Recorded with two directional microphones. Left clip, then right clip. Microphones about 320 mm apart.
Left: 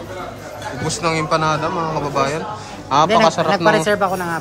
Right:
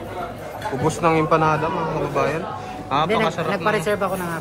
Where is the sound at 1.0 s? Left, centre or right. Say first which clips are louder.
Even; centre.